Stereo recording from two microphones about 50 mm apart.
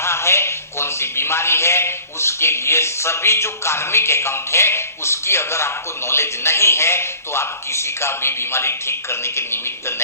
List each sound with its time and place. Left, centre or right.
0.0 s a man's voice: left